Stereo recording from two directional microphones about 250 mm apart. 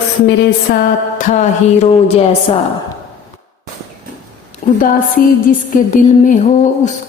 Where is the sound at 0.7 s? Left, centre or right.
Left.